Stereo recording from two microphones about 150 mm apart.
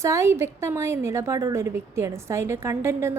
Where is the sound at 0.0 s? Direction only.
20° right (ahead or behind).